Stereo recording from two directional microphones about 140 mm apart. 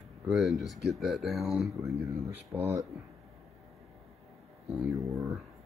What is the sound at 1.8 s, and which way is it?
Speech, 20° right (ahead or behind).